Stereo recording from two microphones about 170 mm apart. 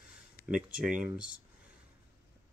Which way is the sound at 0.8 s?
5° right (ahead or behind).